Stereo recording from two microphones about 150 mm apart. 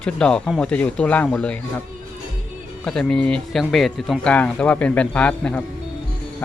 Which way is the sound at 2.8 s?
5° left (ahead or behind).